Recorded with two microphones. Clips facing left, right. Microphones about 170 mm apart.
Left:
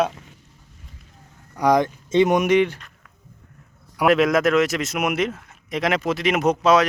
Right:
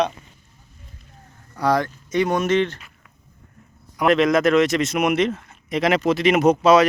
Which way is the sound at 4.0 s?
5° left (ahead or behind).